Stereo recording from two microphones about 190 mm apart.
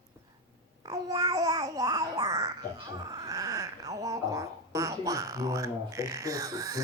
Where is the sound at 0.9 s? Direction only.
20° right (ahead or behind).